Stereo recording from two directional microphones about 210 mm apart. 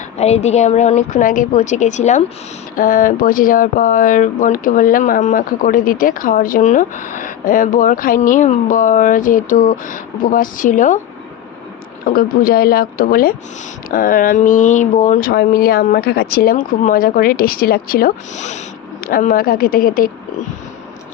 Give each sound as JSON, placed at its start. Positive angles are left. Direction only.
{"t": 0.2, "sound": "speech", "side_deg": 30}
{"t": 12.1, "sound": "speech", "side_deg": 45}